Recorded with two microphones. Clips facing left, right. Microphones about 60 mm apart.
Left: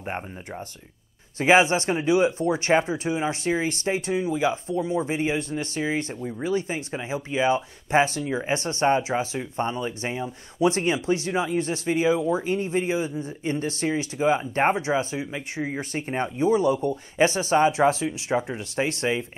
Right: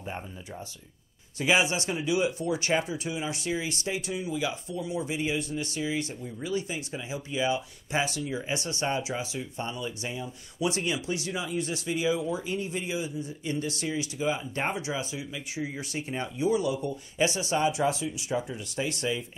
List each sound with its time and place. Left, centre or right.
0.0 s speech: left